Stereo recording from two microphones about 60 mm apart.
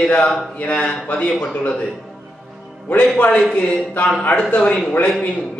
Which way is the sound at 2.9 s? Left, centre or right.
Left.